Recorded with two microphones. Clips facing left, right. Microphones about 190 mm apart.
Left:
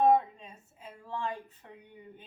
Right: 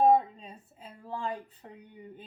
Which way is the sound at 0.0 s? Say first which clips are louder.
Right 1 dB; 35° right (ahead or behind).